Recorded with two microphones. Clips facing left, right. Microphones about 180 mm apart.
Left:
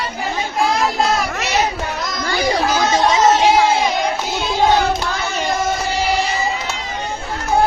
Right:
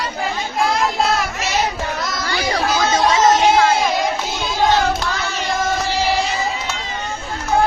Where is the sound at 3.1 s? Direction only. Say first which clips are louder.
Even; 15° left (ahead or behind).